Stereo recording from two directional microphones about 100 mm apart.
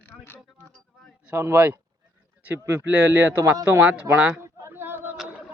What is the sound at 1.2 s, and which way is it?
Speech, 25° right (ahead or behind).